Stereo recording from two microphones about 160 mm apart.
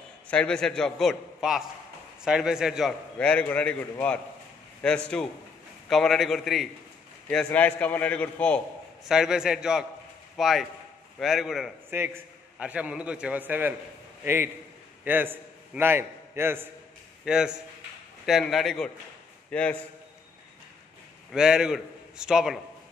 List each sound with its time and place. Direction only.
0.3 s a man's voice: 5° left (ahead or behind)
3.2 s a man's voice: 5° left (ahead or behind)
9.1 s a man's voice: 5° right (ahead or behind)
11.9 s a man's voice: 15° right (ahead or behind); by 19.8 s 10° left (ahead or behind)
21.3 s a man's voice: 5° right (ahead or behind)